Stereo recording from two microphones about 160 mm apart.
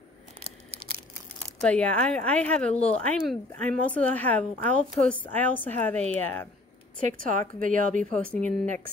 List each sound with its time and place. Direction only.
1.6 s speech: 5° left (ahead or behind)
7.1 s a woman's voice: 55° right (ahead or behind)
8.0 s speech: 5° left (ahead or behind)